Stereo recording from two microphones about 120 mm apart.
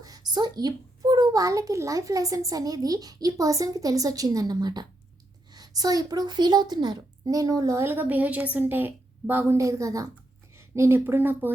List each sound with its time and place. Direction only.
0.0 s a child's voice: 35° right (ahead or behind); by 11.5 s 15° right (ahead or behind)